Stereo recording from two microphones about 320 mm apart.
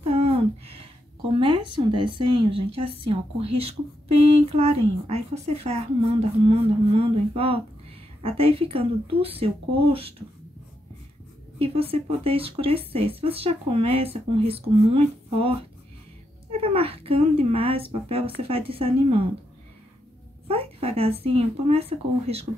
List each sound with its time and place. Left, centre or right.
0.0 s a sound: centre
1.4 s speech: centre
11.6 s speech: centre
16.5 s speech: centre
20.4 s speech: centre